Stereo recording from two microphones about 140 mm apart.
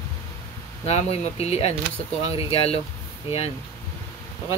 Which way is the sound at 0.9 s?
50° left (ahead or behind).